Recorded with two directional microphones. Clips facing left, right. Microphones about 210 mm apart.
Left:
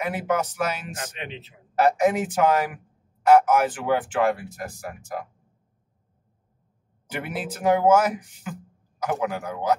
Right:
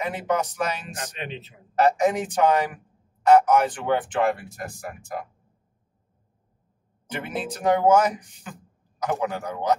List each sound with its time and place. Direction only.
0.0 s speech: 5° left (ahead or behind)
1.1 s a man's voice: 40° right (ahead or behind)
1.8 s speech: 5° left (ahead or behind)
7.1 s a man's voice: 10° left (ahead or behind)